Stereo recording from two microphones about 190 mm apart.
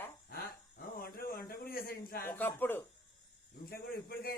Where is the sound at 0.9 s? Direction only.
50° left (ahead or behind).